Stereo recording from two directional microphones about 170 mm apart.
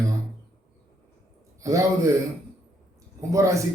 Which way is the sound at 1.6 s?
20° right (ahead or behind).